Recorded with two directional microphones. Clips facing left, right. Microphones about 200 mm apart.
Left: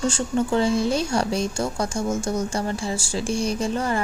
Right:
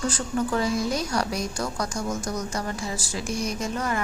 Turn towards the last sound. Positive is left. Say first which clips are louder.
# left 4 dB
turn(degrees=30)  # may be behind; listen again after turning